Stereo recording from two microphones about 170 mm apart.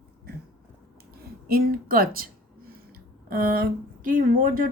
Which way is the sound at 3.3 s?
60° right (ahead or behind).